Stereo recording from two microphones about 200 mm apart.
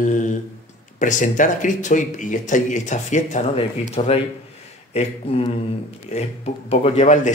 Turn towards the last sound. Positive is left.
turn(degrees=35)  # may be behind; listen again after turning